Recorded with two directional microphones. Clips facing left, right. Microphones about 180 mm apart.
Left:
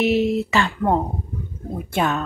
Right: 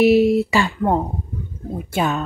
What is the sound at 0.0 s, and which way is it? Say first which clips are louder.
Speech: right 5 dB; 10° right (ahead or behind).